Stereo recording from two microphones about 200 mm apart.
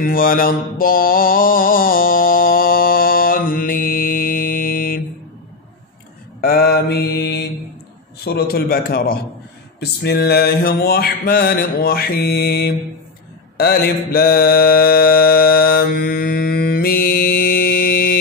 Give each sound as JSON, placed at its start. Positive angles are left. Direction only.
{"t": 0.0, "sound": "mantra", "side_deg": 45}
{"t": 6.4, "sound": "mantra", "side_deg": 50}